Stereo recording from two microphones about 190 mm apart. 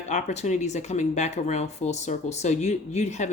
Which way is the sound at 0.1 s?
40° left (ahead or behind).